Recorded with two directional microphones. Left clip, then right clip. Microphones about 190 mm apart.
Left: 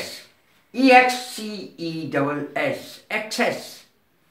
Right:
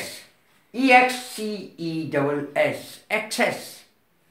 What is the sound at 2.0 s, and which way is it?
Speech, 30° right (ahead or behind).